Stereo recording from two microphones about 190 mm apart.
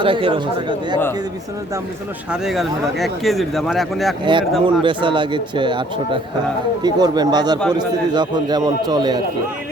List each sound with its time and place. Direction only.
0.0 s a man's voice: 25° right (ahead or behind)
2.3 s speech: centre (ahead or behind)
4.2 s a man's voice: 25° right (ahead or behind)